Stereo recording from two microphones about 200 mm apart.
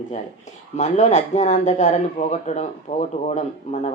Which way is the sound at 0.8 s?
35° left (ahead or behind).